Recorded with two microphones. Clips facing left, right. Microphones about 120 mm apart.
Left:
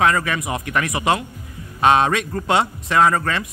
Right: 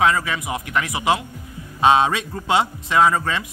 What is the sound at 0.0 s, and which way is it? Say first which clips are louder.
Speech: left 1 dB; 10° right (ahead or behind).